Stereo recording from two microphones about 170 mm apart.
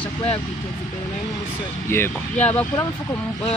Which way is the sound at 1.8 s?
15° left (ahead or behind).